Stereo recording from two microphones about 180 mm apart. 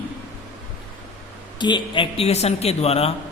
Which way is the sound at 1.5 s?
25° left (ahead or behind).